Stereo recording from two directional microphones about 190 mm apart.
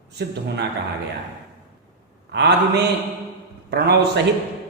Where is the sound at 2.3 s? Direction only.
60° right (ahead or behind).